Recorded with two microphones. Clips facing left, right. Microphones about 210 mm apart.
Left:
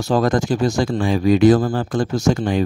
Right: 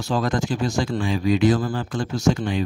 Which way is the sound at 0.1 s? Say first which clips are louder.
Left 6 dB; 45° left (ahead or behind).